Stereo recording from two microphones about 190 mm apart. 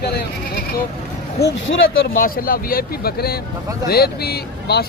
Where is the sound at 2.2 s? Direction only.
50° left (ahead or behind).